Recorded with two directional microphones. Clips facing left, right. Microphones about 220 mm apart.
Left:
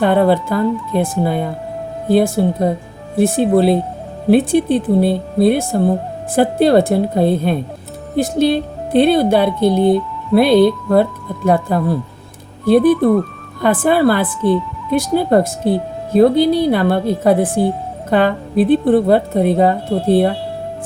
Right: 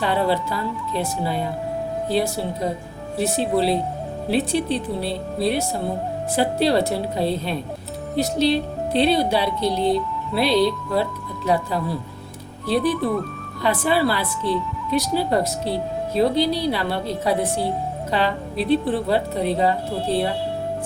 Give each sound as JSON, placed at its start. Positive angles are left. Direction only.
{"t": 0.0, "sound": "speech", "side_deg": 55}